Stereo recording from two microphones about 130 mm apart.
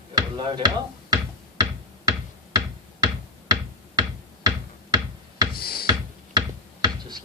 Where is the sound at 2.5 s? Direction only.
30° right (ahead or behind).